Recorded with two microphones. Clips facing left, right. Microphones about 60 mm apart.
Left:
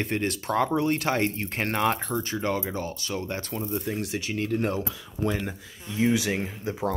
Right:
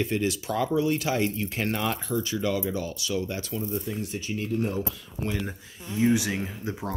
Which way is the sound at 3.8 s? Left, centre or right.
Left.